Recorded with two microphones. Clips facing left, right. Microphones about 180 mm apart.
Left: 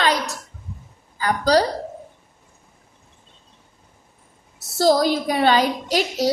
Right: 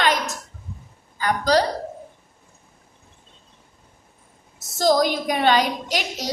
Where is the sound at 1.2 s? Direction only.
35° left (ahead or behind).